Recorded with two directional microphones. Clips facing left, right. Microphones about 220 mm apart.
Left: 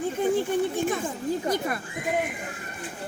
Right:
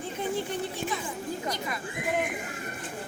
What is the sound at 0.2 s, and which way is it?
Speech, 50° left (ahead or behind).